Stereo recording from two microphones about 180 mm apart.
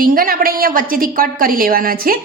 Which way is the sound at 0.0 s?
50° right (ahead or behind).